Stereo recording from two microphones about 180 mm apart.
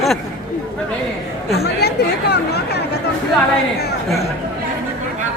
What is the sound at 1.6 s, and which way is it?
Chatter, 65° left (ahead or behind).